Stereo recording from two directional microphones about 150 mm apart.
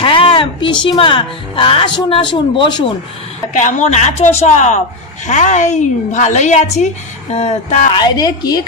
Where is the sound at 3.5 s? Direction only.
55° left (ahead or behind).